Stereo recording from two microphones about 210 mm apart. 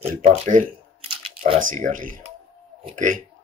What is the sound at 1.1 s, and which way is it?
Camera, 25° right (ahead or behind).